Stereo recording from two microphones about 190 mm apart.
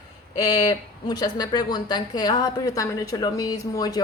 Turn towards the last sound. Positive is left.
turn(degrees=20)  # may be behind; listen again after turning